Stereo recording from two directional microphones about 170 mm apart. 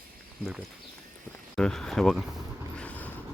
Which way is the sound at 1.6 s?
5° left (ahead or behind).